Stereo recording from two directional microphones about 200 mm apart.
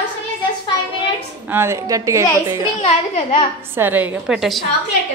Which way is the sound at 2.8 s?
30° left (ahead or behind).